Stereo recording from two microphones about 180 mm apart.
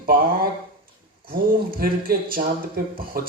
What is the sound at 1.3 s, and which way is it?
Speech, 55° right (ahead or behind).